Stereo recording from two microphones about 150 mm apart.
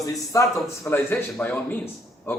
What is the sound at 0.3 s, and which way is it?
Speech, 20° left (ahead or behind).